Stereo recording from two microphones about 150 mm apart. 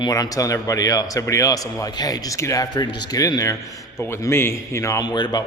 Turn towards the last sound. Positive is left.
turn(degrees=30)  # may be behind; listen again after turning